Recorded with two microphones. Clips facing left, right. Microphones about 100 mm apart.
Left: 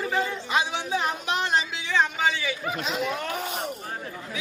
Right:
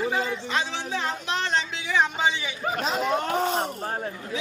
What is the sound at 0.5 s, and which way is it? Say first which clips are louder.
A man's voice: left 5 dB; 15° left (ahead or behind).